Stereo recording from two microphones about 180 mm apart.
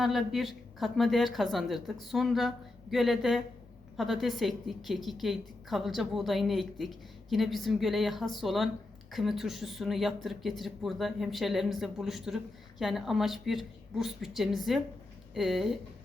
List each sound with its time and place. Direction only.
0.0 s a woman's voice: centre (ahead or behind)